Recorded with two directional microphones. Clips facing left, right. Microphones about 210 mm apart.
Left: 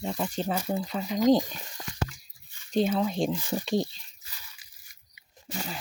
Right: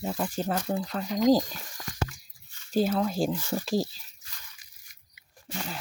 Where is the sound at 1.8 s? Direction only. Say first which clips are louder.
Even; 25° left (ahead or behind).